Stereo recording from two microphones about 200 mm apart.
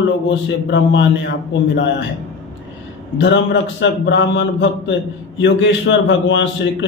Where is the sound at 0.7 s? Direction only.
65° left (ahead or behind).